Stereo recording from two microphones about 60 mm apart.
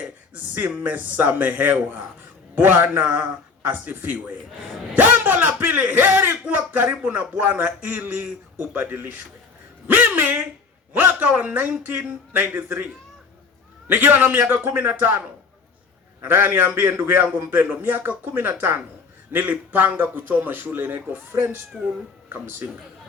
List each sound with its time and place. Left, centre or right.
0.8 s a man's voice: right
4.9 s a sound: right
6.5 s a man's voice: right
9.8 s a sound: right
10.9 s a man's voice: right
16.2 s a man's voice: right
21.7 s speech: centre
22.3 s speech: right